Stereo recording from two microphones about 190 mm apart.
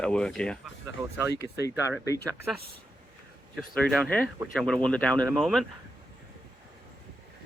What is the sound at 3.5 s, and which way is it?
Speech, 5° left (ahead or behind).